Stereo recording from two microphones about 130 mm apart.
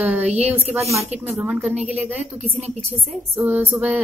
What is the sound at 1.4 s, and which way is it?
Speech, 10° right (ahead or behind).